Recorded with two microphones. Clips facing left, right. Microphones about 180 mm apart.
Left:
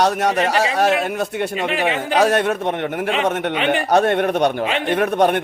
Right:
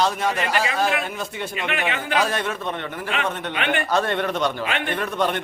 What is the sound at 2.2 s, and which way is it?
Speech, 65° left (ahead or behind).